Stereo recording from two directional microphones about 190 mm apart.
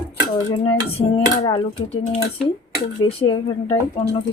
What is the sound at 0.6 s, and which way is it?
Speech, 30° left (ahead or behind).